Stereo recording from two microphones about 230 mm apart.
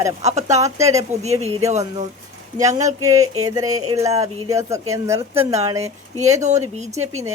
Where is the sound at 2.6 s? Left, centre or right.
Centre.